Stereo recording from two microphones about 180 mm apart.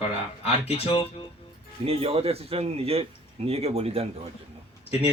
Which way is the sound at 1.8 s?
35° right (ahead or behind).